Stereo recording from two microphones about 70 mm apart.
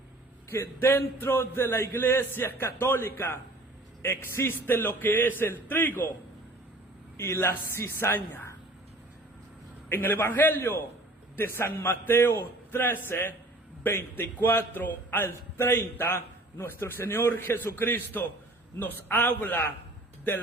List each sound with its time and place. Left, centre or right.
0.5 s a man's voice: left
7.2 s a man's voice: left
9.9 s a man's voice: left